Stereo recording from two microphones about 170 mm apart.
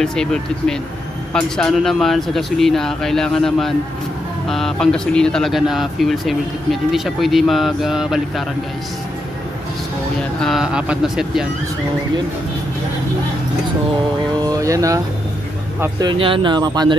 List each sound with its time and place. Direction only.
0.0 s speech: 5° left (ahead or behind)
10.4 s speech: centre (ahead or behind)
14.4 s a sound: 20° right (ahead or behind)
15.8 s speech: 25° right (ahead or behind)